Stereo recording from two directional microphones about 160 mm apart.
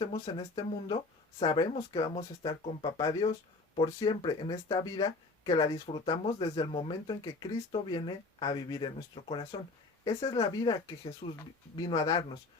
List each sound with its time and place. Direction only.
0.1 s speech: 30° left (ahead or behind)